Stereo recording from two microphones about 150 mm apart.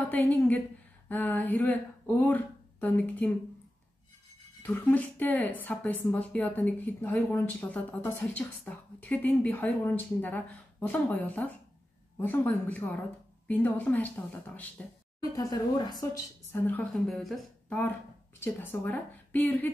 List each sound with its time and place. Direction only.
0.0 s a woman's voice: 10° left (ahead or behind)
4.6 s a woman's voice: 10° left (ahead or behind)
15.3 s speech: 25° left (ahead or behind)
16.5 s a woman's voice: 10° left (ahead or behind)
17.1 s speech: centre (ahead or behind)
18.4 s a woman's voice: 15° left (ahead or behind)